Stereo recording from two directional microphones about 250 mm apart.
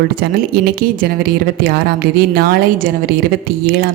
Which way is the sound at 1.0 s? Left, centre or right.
Right.